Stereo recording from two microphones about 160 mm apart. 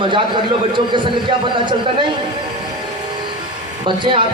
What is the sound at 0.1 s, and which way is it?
Speech, 30° right (ahead or behind).